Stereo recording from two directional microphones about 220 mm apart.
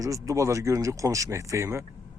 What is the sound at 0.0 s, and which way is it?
Speech, 15° right (ahead or behind).